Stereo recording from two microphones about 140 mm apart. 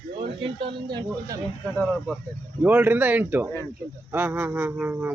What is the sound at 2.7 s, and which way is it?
Speech, 10° right (ahead or behind).